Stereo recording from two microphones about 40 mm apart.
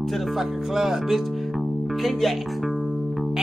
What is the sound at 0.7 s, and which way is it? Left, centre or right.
Speech, centre.